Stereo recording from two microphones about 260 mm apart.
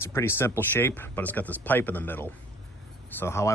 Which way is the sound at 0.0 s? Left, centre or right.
Centre.